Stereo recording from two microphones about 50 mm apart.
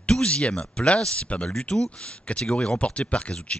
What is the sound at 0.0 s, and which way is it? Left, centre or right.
Speech, centre.